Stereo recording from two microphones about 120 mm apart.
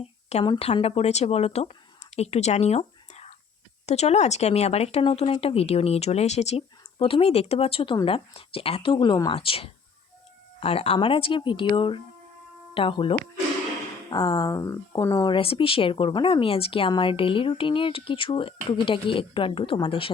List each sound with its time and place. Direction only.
0.0 s a sound: 60° left (ahead or behind)
0.6 s a woman's voice: 55° left (ahead or behind)
7.0 s speech: 50° left (ahead or behind)
14.1 s speech: 35° left (ahead or behind)
15.4 s speech: 50° left (ahead or behind)